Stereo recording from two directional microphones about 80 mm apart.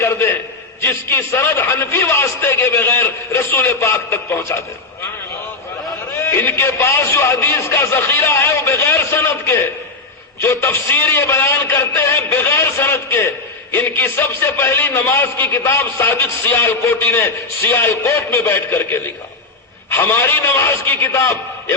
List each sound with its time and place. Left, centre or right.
0.0 s a man's voice: left
6.3 s a man's voice: left